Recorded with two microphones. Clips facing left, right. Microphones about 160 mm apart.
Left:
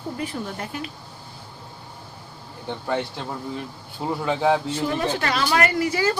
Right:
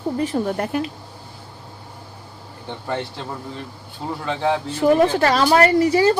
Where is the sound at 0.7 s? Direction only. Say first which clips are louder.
Right 9 dB; 60° right (ahead or behind).